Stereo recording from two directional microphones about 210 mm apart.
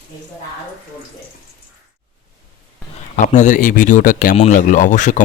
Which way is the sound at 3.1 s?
35° left (ahead or behind).